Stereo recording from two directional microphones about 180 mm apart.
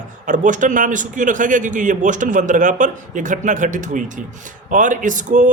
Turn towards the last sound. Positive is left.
turn(degrees=-45)  # may be behind; listen again after turning